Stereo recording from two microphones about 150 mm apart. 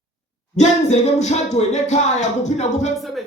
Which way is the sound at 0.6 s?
50° left (ahead or behind).